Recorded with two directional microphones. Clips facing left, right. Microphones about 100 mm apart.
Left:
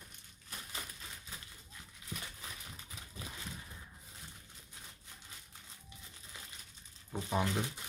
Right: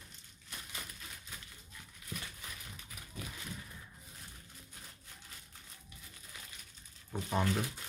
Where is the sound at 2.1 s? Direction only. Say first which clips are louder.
Right 1 dB; 25° left (ahead or behind).